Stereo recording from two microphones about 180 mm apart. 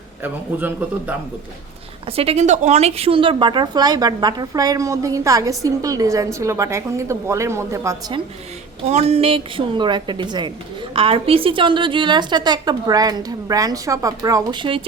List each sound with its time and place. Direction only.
0.2 s a man's voice: 10° right (ahead or behind)
2.0 s a woman's voice: 35° right (ahead or behind); by 8.1 s 15° right (ahead or behind)
8.9 s a woman's voice: 35° right (ahead or behind)